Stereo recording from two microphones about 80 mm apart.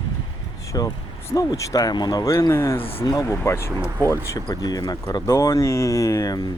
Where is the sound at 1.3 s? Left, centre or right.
Left.